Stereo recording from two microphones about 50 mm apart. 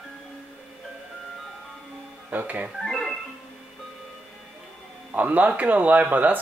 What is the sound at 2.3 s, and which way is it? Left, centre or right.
Music, right.